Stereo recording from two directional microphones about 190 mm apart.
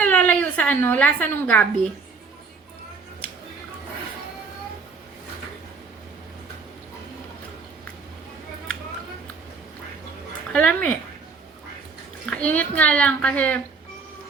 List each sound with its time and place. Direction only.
0.0 s a woman's voice: 5° left (ahead or behind)
10.5 s a child's voice: 5° left (ahead or behind)
12.2 s a child's voice: 5° left (ahead or behind)